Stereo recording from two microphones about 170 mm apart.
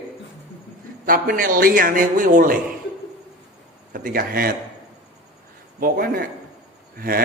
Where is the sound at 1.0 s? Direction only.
55° right (ahead or behind).